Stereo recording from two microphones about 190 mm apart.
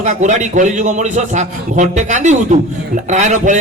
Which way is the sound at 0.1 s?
40° right (ahead or behind).